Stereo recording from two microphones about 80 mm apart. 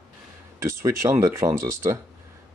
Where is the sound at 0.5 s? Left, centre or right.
Right.